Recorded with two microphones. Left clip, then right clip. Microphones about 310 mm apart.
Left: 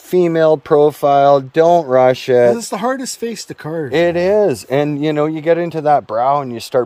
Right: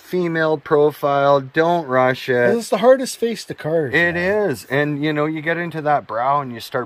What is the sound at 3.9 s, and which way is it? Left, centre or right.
Speech, left.